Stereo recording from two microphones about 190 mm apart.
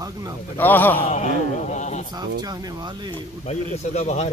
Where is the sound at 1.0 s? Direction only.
40° left (ahead or behind).